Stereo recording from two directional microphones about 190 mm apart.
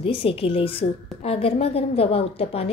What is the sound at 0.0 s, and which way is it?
A woman's voice, 30° left (ahead or behind).